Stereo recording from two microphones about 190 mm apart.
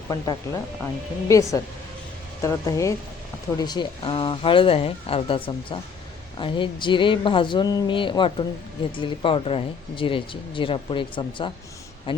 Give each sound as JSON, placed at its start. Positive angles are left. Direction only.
{"t": 0.1, "sound": "speech", "side_deg": 20}